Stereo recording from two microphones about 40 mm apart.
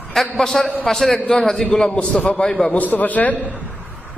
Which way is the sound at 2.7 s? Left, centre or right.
Left.